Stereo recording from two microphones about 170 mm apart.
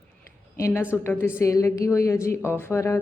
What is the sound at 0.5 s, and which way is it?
A woman's voice, 15° left (ahead or behind).